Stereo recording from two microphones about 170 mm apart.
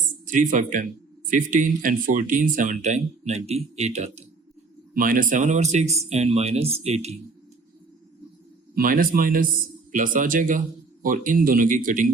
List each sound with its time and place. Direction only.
0.3 s speech: 50° right (ahead or behind)
4.9 s speech: 55° right (ahead or behind)
8.7 s speech: 55° right (ahead or behind)